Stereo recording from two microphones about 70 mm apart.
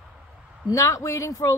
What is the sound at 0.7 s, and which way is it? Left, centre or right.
Speech, left.